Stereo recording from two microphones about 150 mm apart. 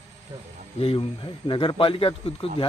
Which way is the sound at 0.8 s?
40° left (ahead or behind).